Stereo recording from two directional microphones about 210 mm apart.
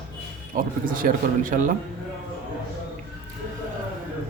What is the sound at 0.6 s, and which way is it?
Speech, 40° right (ahead or behind).